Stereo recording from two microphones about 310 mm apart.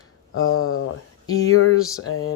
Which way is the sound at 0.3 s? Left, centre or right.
Left.